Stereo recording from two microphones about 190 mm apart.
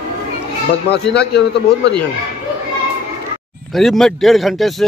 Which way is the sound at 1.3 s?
65° left (ahead or behind).